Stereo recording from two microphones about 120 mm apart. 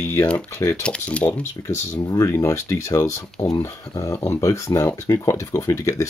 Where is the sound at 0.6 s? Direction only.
25° left (ahead or behind).